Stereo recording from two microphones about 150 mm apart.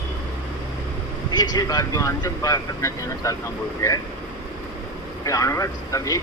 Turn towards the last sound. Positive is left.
turn(degrees=20)  # may be behind; listen again after turning